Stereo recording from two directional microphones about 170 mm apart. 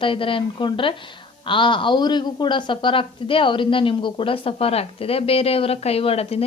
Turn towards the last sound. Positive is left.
turn(degrees=35)  # may be behind; listen again after turning